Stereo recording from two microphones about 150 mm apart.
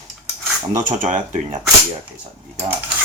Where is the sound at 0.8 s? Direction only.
55° right (ahead or behind).